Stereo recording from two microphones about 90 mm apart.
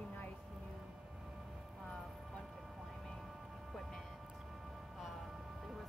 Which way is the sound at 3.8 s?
5° left (ahead or behind).